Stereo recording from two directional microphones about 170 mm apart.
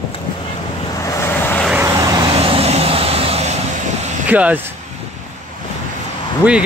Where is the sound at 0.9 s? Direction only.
20° left (ahead or behind).